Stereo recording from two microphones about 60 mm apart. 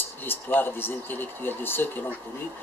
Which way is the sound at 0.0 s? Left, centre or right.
Left.